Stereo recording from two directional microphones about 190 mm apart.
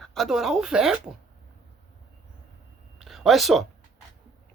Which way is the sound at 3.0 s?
Centre (ahead or behind).